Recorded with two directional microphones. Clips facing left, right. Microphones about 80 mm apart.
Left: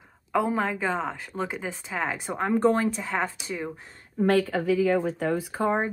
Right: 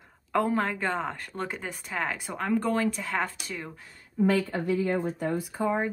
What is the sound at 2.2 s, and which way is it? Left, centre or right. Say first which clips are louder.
Speech: left 4 dB; left.